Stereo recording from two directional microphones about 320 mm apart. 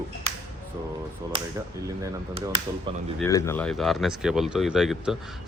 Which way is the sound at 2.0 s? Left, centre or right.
Centre.